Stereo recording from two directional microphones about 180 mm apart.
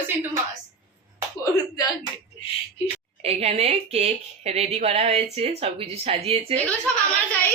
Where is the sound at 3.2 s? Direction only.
35° right (ahead or behind).